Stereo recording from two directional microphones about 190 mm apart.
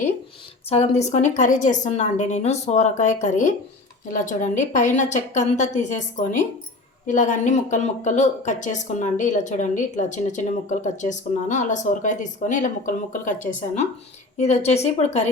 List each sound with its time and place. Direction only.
0.7 s speech: 35° left (ahead or behind)